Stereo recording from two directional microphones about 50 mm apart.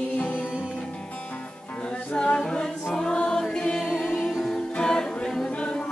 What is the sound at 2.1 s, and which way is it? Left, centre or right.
A capella, centre.